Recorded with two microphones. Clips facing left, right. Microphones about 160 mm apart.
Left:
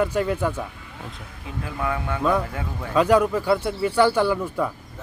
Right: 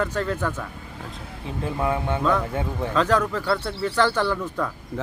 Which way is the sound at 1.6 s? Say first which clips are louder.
Right 3 dB; 25° right (ahead or behind).